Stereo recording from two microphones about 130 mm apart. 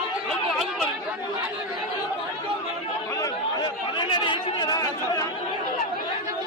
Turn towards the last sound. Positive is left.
turn(degrees=30)  # may be behind; listen again after turning